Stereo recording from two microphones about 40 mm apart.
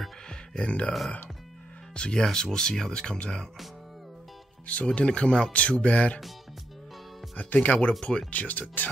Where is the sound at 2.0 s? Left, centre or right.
Left.